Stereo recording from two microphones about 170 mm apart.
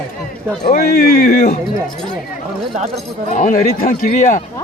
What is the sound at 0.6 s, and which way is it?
Speech, 55° left (ahead or behind).